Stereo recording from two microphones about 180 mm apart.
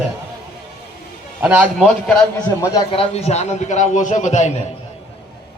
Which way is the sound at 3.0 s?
35° left (ahead or behind).